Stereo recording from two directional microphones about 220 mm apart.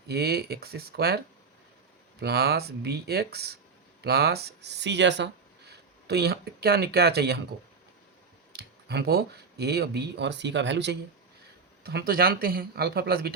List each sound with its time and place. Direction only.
0.1 s a man's voice: 45° right (ahead or behind)
2.2 s a man's voice: 45° right (ahead or behind)
8.5 s a man's voice: 50° right (ahead or behind)